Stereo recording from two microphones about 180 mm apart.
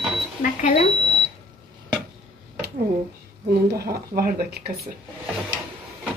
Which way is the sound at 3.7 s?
60° right (ahead or behind).